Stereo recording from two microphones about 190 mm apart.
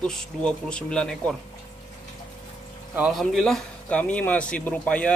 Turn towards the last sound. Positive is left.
turn(degrees=5)  # may be behind; listen again after turning